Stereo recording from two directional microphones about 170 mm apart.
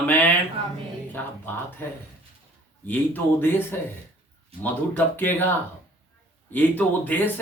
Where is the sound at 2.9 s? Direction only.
10° left (ahead or behind).